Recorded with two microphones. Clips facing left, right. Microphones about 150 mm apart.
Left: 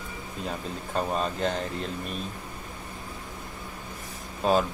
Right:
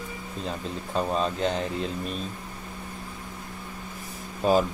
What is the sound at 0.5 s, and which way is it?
Speech, 5° left (ahead or behind).